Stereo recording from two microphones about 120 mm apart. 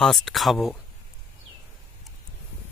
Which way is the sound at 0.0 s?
Centre (ahead or behind).